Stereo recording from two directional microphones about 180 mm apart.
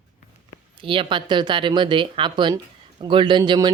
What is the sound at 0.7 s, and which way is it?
Speech, 30° right (ahead or behind).